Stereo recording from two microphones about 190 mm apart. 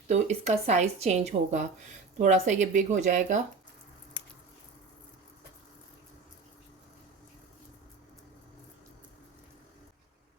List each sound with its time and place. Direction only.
0.1 s speech: 35° right (ahead or behind)